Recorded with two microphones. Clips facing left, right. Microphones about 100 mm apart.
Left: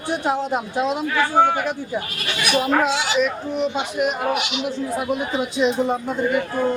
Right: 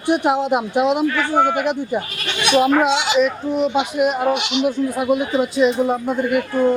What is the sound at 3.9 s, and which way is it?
Speech, centre (ahead or behind).